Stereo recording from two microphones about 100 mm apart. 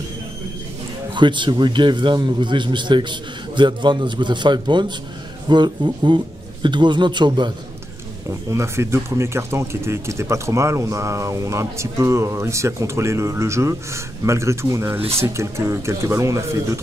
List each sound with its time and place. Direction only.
1.1 s a man's voice: 50° right (ahead or behind)
8.3 s speech: 30° right (ahead or behind)
15.0 s speech: 80° right
15.2 s speech: 30° right (ahead or behind)